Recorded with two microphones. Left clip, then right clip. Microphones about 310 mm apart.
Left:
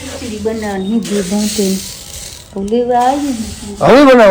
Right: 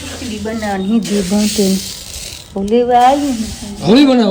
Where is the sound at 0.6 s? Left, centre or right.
Centre.